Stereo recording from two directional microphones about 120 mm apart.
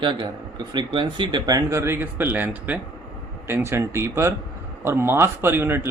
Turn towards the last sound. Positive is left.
turn(degrees=-20)  # may be behind; listen again after turning